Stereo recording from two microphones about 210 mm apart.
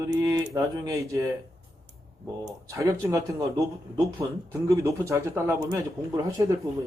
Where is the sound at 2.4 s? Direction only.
15° right (ahead or behind).